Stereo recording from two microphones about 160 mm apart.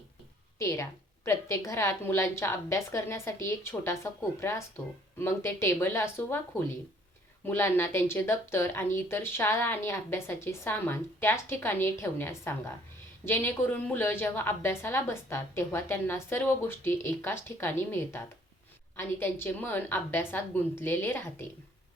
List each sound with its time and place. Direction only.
0.6 s a woman's voice: 20° left (ahead or behind)